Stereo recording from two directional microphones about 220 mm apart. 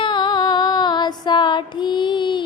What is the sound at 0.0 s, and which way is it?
Female singing, 20° left (ahead or behind).